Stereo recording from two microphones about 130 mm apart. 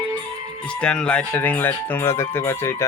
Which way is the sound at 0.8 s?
10° left (ahead or behind).